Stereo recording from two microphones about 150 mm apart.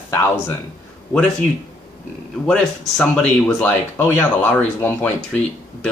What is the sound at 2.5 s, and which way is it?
Speech, 5° left (ahead or behind).